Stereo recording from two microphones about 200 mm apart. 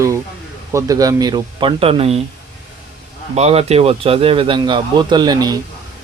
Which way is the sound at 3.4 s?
30° right (ahead or behind).